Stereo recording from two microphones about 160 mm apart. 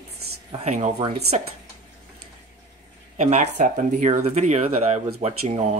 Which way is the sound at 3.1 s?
45° right (ahead or behind).